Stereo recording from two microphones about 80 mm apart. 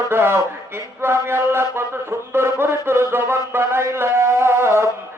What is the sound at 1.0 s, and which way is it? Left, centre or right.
Music, right.